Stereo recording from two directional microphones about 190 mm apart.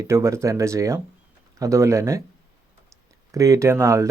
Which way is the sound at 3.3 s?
15° right (ahead or behind).